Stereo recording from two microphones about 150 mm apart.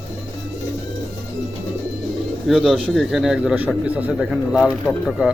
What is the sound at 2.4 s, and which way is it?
A man's voice, 5° right (ahead or behind).